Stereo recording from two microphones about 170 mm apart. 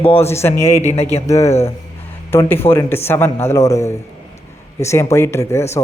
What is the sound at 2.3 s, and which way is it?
Speech, 15° left (ahead or behind).